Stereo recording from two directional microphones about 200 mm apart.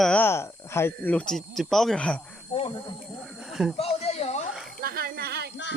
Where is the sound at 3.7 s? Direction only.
30° left (ahead or behind).